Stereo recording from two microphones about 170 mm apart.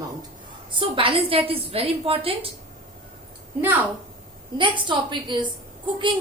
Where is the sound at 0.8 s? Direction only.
30° right (ahead or behind).